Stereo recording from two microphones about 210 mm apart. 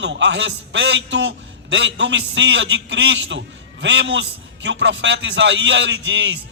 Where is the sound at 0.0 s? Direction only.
60° right (ahead or behind).